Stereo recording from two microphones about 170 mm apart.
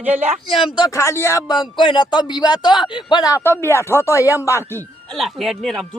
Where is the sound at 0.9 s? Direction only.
15° left (ahead or behind).